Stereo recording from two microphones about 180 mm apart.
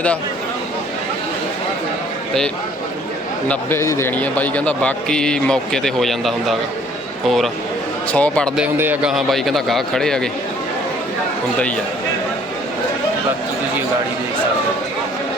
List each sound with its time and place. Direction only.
3.5 s a man's voice: 15° left (ahead or behind)
8.6 s a man's voice: 10° right (ahead or behind)